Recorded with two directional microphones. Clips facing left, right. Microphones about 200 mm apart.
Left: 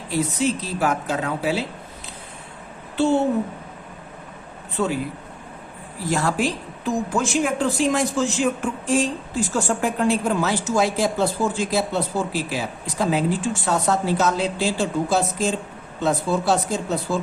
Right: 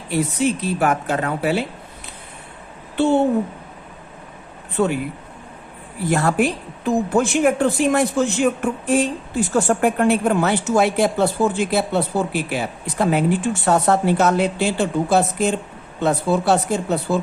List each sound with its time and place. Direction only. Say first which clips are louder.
0.1 s a woman's voice: right 2 dB; 60° right (ahead or behind)
6.0 s a woman's voice: right 4 dB; 60° right (ahead or behind)